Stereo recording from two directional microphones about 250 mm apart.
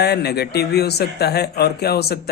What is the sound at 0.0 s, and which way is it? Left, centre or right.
Speech, left.